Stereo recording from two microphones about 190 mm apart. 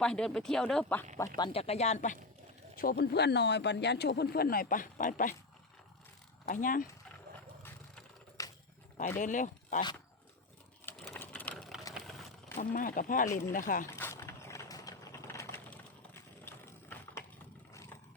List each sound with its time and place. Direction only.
0.0 s speech: 5° left (ahead or behind)
1.4 s speech: 30° left (ahead or behind)
2.7 s speech: 50° left (ahead or behind)
6.5 s speech: 45° left (ahead or behind)
7.6 s a sound: 10° left (ahead or behind)
9.0 s speech: 40° left (ahead or behind)
10.8 s sewing machine: centre (ahead or behind)
12.7 s speech: 45° left (ahead or behind)
14.0 s a sound: 15° left (ahead or behind)